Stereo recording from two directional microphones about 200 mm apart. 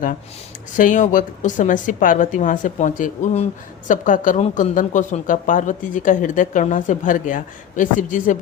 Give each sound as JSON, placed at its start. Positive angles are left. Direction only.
{"t": 0.8, "sound": "speech", "side_deg": 40}